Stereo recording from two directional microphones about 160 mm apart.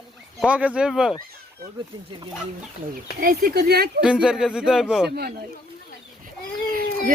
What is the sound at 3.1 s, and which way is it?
Speech, 65° right (ahead or behind).